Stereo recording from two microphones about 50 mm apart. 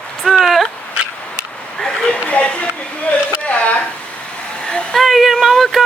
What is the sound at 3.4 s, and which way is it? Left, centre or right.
Speech, left.